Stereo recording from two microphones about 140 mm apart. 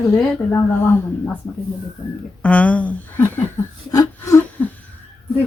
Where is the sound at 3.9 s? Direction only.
20° left (ahead or behind).